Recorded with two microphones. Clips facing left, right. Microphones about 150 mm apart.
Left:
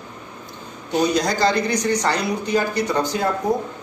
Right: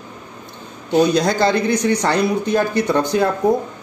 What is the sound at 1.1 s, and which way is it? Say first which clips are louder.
Speech: right 3 dB; 60° right (ahead or behind).